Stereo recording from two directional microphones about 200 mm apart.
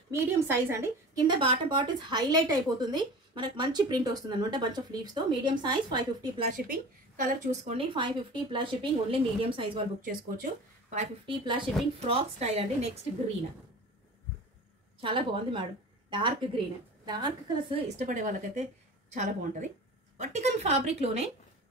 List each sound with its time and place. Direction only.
0.1 s a woman's voice: 15° right (ahead or behind)
6.5 s a woman's voice: 40° right (ahead or behind); by 9.8 s 25° right (ahead or behind)
10.0 s speech: 45° right (ahead or behind)
11.2 s a woman's voice: 25° right (ahead or behind)
15.0 s a woman's voice: 25° right (ahead or behind)